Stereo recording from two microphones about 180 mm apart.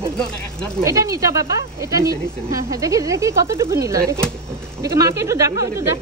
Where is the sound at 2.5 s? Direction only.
20° right (ahead or behind).